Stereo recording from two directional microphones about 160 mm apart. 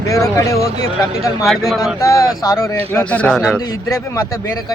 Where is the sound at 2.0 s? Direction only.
20° left (ahead or behind).